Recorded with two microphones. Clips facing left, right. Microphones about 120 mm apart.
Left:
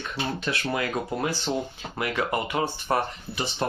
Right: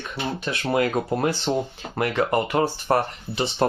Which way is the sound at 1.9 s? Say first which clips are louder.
Right 5 dB; 45° right (ahead or behind).